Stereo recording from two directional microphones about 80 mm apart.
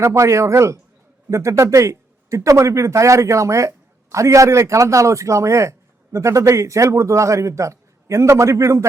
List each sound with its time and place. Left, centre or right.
0.0 s a man's voice: right